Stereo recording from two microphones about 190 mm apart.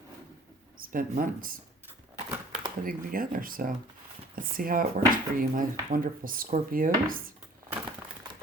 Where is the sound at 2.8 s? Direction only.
50° right (ahead or behind).